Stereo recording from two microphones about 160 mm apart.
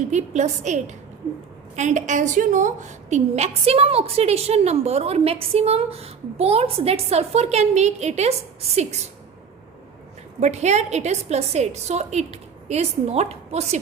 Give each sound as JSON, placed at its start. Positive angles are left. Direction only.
{"t": 0.1, "sound": "a woman's voice", "side_deg": -45}
{"t": 10.4, "sound": "a woman's voice", "side_deg": -45}